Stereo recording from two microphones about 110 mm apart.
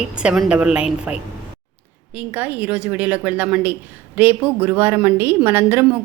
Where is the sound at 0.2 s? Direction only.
10° right (ahead or behind).